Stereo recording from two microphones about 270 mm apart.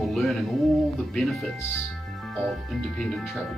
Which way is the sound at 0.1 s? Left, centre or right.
Centre.